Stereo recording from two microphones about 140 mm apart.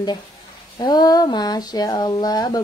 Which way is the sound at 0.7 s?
30° left (ahead or behind).